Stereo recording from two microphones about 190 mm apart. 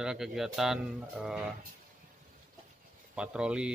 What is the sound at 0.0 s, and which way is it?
Speech, 5° right (ahead or behind).